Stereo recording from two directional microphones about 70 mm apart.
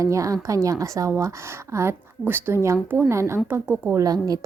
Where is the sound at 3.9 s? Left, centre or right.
Right.